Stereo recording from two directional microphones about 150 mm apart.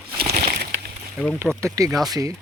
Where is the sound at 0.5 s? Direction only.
90° right.